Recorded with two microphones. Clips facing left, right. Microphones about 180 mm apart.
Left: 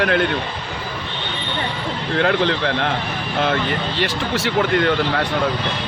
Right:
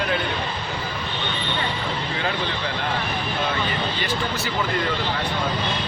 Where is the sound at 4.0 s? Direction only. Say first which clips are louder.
Left 5 dB; 80° left.